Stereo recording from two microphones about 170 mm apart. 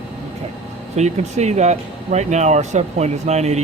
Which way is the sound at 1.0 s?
40° right (ahead or behind).